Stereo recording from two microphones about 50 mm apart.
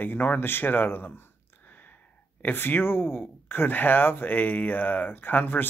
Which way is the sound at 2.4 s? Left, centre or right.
Left.